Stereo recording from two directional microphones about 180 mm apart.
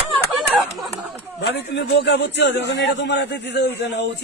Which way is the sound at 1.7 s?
75° left (ahead or behind).